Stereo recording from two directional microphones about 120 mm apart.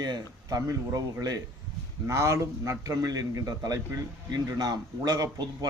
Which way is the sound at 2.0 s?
25° right (ahead or behind).